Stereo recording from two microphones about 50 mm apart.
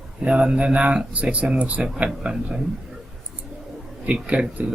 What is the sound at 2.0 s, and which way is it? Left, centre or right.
Speech, centre.